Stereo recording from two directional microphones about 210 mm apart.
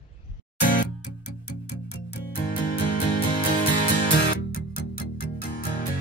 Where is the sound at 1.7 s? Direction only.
50° left (ahead or behind).